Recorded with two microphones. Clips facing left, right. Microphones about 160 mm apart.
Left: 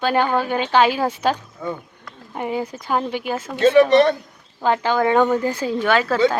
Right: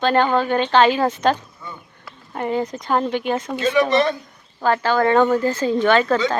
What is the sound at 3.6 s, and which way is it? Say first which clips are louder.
Speech: left 6 dB; 55° left (ahead or behind).